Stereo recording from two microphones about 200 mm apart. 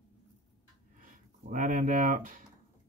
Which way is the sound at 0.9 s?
40° right (ahead or behind).